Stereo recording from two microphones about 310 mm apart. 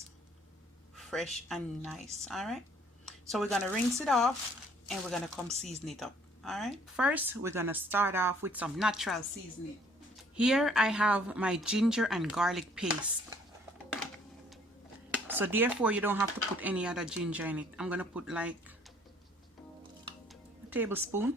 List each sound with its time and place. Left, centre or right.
0.9 s speech: centre
10.3 s speech: centre
15.1 s speech: centre
20.2 s music: centre